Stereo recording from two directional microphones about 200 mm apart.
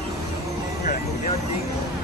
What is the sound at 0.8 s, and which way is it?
Vehicle, 40° left (ahead or behind).